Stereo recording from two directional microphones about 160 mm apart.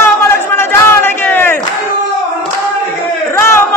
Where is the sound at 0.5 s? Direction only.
15° left (ahead or behind).